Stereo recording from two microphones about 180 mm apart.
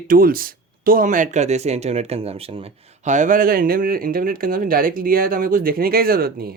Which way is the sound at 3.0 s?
45° right (ahead or behind).